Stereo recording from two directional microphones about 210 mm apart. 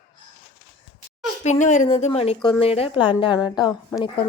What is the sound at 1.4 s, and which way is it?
Speech, 35° left (ahead or behind).